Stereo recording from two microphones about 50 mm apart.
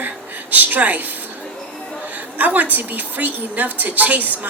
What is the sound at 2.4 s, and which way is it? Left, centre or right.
A woman's voice, right.